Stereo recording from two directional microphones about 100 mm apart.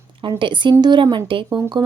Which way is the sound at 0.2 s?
55° right (ahead or behind).